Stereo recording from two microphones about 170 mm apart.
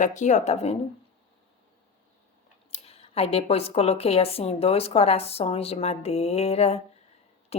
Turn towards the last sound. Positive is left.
turn(degrees=35)  # may be behind; listen again after turning